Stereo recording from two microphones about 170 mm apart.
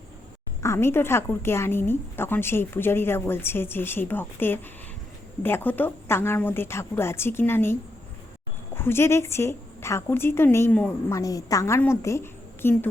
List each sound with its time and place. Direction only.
0.6 s a woman's voice: 15° left (ahead or behind)